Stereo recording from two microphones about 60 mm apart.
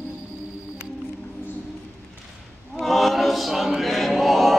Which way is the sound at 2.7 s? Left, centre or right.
Centre.